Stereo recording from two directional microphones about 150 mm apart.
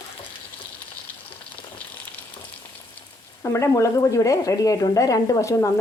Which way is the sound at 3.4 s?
20° left (ahead or behind).